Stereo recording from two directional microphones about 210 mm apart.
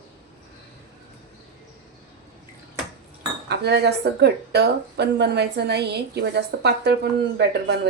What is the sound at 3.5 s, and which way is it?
Speech, 50° right (ahead or behind).